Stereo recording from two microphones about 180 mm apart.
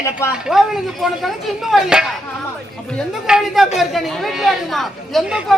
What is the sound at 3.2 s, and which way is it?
Speech, centre (ahead or behind).